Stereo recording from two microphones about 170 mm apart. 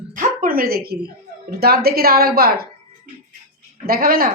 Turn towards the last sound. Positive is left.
turn(degrees=-60)  # may be behind; listen again after turning